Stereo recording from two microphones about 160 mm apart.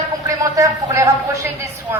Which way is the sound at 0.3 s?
20° right (ahead or behind).